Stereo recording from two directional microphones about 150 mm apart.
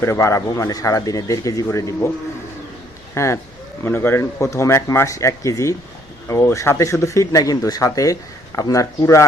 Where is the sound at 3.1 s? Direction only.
20° left (ahead or behind).